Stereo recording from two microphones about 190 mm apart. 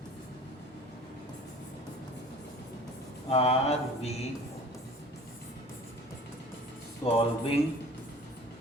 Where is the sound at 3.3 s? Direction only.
35° left (ahead or behind).